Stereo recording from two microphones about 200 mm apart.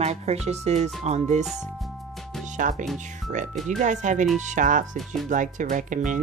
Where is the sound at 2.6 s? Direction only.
40° right (ahead or behind).